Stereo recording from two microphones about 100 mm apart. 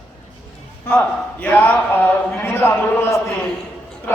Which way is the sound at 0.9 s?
20° left (ahead or behind).